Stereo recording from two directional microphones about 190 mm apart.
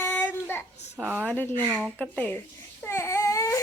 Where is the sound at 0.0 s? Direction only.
10° left (ahead or behind).